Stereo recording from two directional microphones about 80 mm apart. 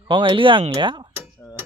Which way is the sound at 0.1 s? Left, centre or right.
Right.